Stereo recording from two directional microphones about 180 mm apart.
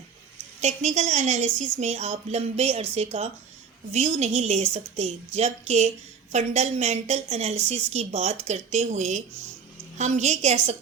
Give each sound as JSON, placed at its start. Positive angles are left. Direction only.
{"t": 0.6, "sound": "a woman's voice", "side_deg": -40}